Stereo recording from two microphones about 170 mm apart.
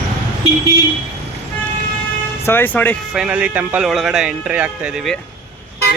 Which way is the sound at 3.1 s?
5° right (ahead or behind).